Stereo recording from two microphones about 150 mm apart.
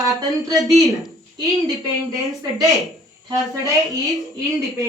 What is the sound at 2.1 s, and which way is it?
Speech, 20° right (ahead or behind).